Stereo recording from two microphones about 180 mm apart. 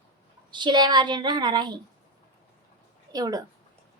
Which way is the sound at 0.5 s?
25° right (ahead or behind).